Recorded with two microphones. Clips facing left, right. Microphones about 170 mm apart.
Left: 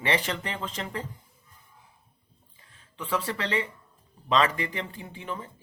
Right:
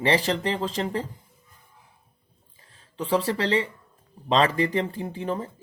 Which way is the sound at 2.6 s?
35° right (ahead or behind).